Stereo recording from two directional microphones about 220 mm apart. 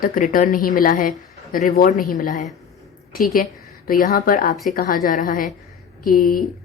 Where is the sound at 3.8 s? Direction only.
40° left (ahead or behind).